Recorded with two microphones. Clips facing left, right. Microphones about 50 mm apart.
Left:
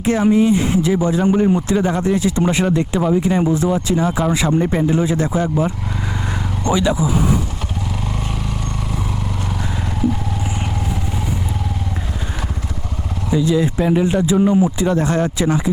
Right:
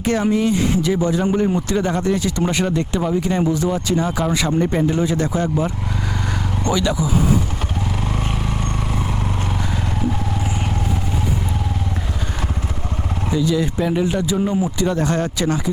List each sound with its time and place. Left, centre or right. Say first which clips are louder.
0.0 s speech: left 3 dB; centre
13.4 s speech: left 3 dB; centre